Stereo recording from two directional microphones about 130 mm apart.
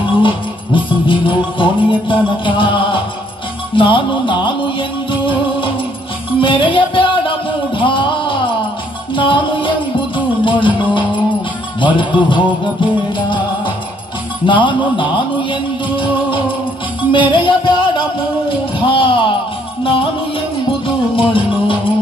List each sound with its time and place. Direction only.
0.7 s music: 40° left (ahead or behind)
18.5 s a sound: 40° left (ahead or behind)
19.8 s music: 45° left (ahead or behind)